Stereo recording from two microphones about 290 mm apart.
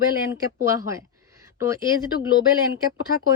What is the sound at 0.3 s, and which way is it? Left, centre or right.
Speech, centre.